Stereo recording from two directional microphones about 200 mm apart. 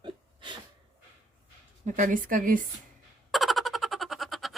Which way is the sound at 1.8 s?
40° right (ahead or behind).